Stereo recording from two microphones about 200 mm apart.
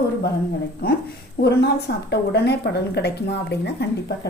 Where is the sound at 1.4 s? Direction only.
55° left (ahead or behind).